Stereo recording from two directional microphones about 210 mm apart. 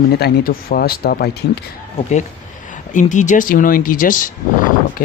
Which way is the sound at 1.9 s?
35° left (ahead or behind).